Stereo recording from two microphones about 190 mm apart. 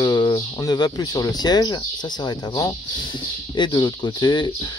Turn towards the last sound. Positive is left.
turn(degrees=25)  # may be behind; listen again after turning